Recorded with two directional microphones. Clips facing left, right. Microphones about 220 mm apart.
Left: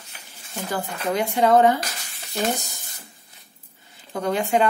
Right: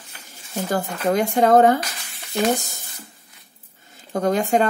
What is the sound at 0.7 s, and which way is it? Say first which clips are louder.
Speech: right 4 dB; 45° right (ahead or behind).